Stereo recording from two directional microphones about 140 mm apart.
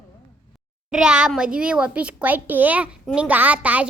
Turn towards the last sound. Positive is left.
turn(degrees=-10)  # may be behind; listen again after turning